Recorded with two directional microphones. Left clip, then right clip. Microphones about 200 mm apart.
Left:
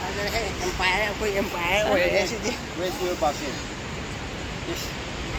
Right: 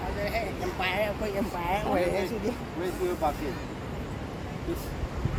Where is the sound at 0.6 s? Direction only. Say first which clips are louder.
Left 6 dB; 40° right (ahead or behind).